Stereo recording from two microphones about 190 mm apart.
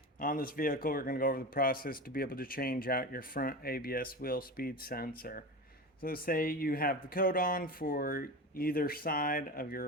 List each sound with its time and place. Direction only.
0.2 s speech: 45° left (ahead or behind)